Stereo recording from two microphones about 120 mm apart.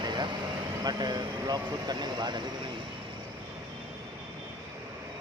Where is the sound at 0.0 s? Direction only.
40° right (ahead or behind).